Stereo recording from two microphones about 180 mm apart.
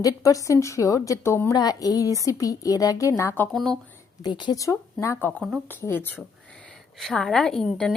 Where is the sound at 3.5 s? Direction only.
Centre (ahead or behind).